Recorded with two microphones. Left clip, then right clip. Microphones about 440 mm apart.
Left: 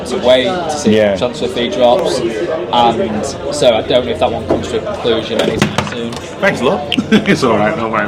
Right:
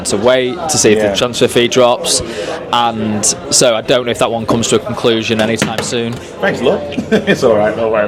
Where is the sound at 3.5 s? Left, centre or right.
Right.